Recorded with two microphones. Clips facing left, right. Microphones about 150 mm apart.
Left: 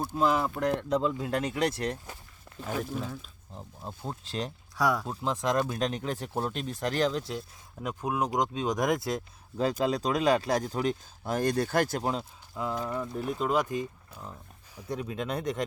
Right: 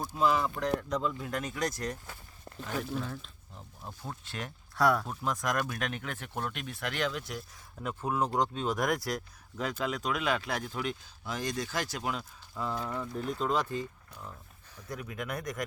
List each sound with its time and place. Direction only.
0.8 s speech: 30° left (ahead or behind)
2.7 s speech: 5° left (ahead or behind)
3.5 s speech: 30° left (ahead or behind)
4.8 s speech: 10° left (ahead or behind)
5.0 s speech: 25° left (ahead or behind)
7.8 s speech: 15° left (ahead or behind); by 12.0 s 55° left (ahead or behind)
12.5 s speech: 15° left (ahead or behind)
14.8 s speech: 25° left (ahead or behind)